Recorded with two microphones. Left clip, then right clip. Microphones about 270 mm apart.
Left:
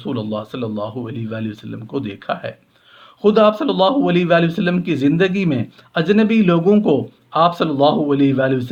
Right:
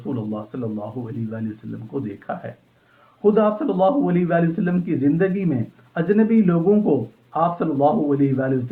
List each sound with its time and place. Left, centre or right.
0.0 s a man's voice: left